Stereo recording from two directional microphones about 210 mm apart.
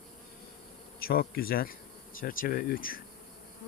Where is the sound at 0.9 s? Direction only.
45° left (ahead or behind).